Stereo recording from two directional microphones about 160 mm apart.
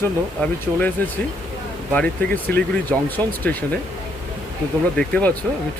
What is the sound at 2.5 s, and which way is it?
Speech, 10° left (ahead or behind).